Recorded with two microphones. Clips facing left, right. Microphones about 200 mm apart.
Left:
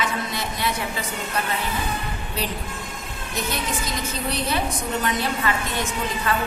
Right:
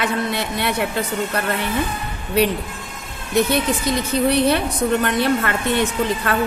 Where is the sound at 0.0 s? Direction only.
65° right (ahead or behind).